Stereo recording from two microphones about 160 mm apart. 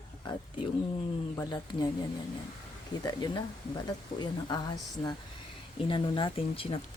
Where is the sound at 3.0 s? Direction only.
25° left (ahead or behind).